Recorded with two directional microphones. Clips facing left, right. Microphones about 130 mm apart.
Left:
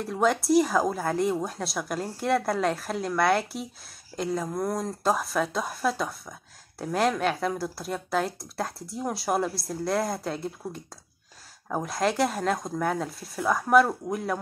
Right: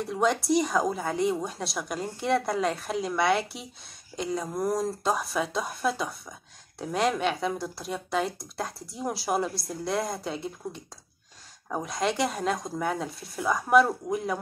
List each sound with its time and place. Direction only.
0.0 s speech: centre (ahead or behind)